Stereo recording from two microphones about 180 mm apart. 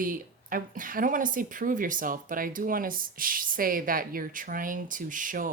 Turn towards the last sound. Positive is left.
turn(degrees=-50)  # may be behind; listen again after turning